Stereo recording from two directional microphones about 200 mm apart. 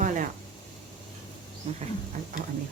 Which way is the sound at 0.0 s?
40° right (ahead or behind).